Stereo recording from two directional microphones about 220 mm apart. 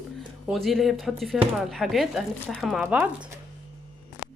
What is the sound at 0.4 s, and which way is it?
Speech, centre (ahead or behind).